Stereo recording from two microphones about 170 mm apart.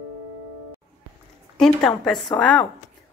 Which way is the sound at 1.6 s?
5° left (ahead or behind).